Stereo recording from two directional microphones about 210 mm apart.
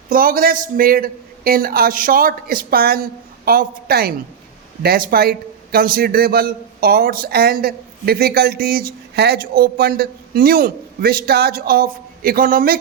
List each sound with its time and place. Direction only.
0.1 s a man's voice: 40° right (ahead or behind)